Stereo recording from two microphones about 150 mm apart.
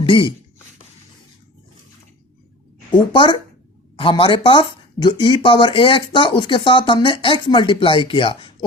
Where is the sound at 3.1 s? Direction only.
35° left (ahead or behind).